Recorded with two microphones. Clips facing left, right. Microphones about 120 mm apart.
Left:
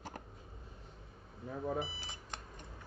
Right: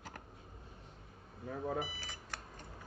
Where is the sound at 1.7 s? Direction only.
25° left (ahead or behind).